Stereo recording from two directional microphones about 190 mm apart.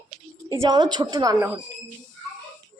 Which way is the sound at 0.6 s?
25° right (ahead or behind).